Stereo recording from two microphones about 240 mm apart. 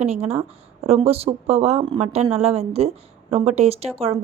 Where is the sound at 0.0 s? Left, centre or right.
Right.